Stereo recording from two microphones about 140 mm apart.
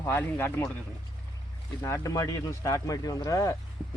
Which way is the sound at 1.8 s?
20° left (ahead or behind).